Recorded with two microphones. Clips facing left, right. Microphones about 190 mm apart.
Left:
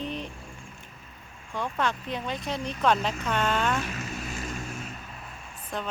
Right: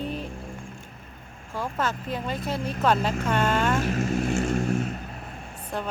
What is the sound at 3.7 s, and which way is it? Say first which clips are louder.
Speech: right 8 dB; 45° right (ahead or behind).